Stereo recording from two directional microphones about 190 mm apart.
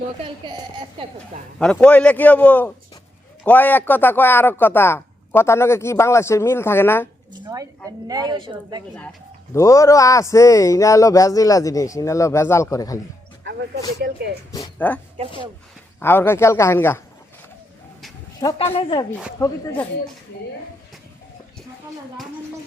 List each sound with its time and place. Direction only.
0.2 s a woman's voice: 25° right (ahead or behind)
1.5 s speech: 5° left (ahead or behind)
7.3 s a woman's voice: 20° right (ahead or behind)
9.6 s speech: 15° left (ahead or behind)
13.4 s a sound: 60° right (ahead or behind)
14.0 s speech: 60° right (ahead or behind)
14.8 s speech: 10° left (ahead or behind)
18.8 s speech: 25° left (ahead or behind)
19.4 s speech: 10° left (ahead or behind)